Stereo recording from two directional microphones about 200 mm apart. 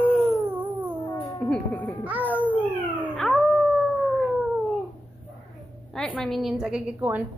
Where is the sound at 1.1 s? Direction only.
15° left (ahead or behind).